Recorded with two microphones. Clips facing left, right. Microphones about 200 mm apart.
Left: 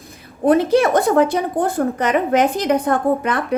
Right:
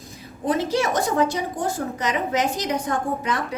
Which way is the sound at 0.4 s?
60° left (ahead or behind).